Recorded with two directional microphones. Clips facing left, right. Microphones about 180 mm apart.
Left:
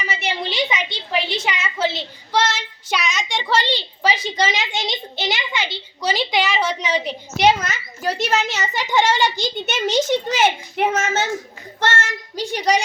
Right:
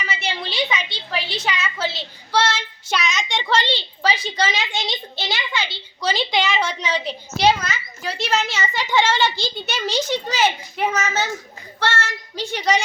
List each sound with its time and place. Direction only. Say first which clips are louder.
0.2 s a sound: left 3 dB; 20° left (ahead or behind)
1.5 s a woman's voice: left 2 dB; 20° left (ahead or behind)
7.6 s a child's voice: left 4 dB; 45° left (ahead or behind)
8.8 s a child's voice: left 1 dB; 15° left (ahead or behind)
9.9 s a child's voice: left 5 dB; 45° left (ahead or behind)